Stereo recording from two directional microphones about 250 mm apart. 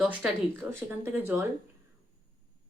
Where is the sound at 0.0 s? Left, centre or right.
Centre.